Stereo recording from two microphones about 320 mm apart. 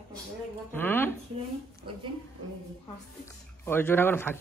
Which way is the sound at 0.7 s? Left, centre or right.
Centre.